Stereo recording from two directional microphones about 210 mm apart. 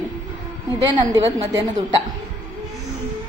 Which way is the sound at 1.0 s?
15° right (ahead or behind).